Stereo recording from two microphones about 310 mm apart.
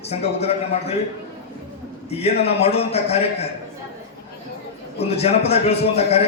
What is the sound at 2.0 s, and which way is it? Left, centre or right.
A man's voice, centre.